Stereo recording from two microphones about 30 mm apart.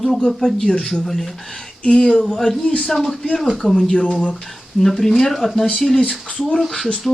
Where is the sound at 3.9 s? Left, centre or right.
Left.